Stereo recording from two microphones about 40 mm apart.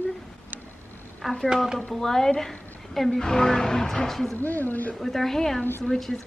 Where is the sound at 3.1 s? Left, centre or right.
Centre.